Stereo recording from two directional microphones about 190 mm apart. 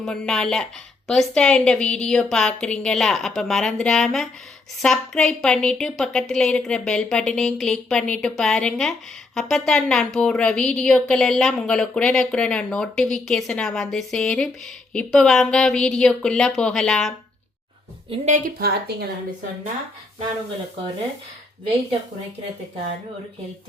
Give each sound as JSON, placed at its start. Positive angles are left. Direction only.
{"t": 0.0, "sound": "a woman's voice", "side_deg": 5}
{"t": 18.1, "sound": "a woman's voice", "side_deg": -40}